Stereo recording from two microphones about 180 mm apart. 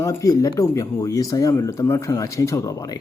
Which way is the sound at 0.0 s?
15° left (ahead or behind).